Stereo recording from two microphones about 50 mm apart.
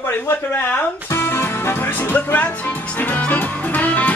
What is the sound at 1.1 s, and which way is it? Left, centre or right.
Music, left.